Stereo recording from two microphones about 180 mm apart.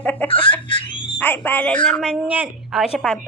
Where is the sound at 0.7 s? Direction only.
30° left (ahead or behind).